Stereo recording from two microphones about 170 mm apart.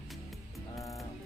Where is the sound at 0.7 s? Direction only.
20° left (ahead or behind).